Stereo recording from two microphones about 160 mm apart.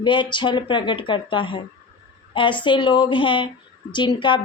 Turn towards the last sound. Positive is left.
turn(degrees=30)  # may be behind; listen again after turning